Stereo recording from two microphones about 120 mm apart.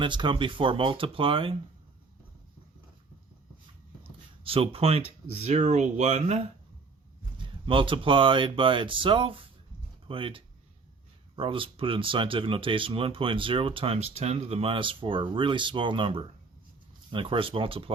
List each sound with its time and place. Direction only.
0.0 s speech: 40° right (ahead or behind)
4.0 s speech: 50° right (ahead or behind); by 6.4 s 70° right (ahead or behind)
7.3 s speech: 45° right (ahead or behind)